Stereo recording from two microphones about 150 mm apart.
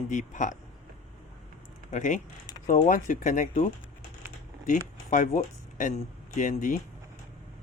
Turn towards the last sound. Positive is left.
turn(degrees=60)  # may be behind; listen again after turning